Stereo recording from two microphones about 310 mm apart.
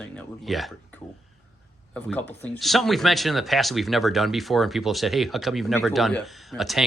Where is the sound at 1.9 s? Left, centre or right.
Centre.